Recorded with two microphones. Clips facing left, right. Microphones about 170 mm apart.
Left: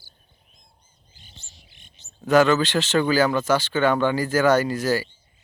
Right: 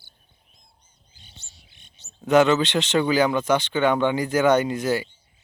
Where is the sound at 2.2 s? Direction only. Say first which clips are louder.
Even; 20° right (ahead or behind).